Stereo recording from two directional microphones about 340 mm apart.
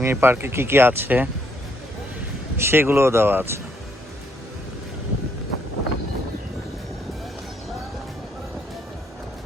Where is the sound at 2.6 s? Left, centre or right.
Centre.